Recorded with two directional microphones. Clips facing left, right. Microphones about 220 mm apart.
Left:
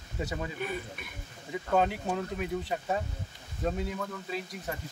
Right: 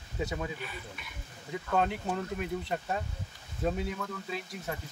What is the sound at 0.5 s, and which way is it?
Speech, 50° left (ahead or behind).